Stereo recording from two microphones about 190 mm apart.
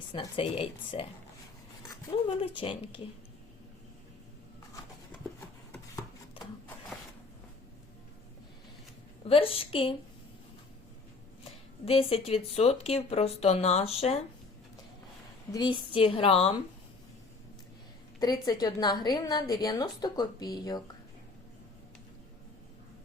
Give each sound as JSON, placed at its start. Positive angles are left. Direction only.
{"t": 0.1, "sound": "a woman's voice", "side_deg": 30}
{"t": 2.4, "sound": "a woman's voice", "side_deg": 25}
{"t": 6.4, "sound": "sewing machine", "side_deg": 30}
{"t": 9.2, "sound": "a woman's voice", "side_deg": 30}
{"t": 11.9, "sound": "speech", "side_deg": 30}
{"t": 15.5, "sound": "a woman's voice", "side_deg": 25}
{"t": 18.2, "sound": "a woman's voice", "side_deg": 20}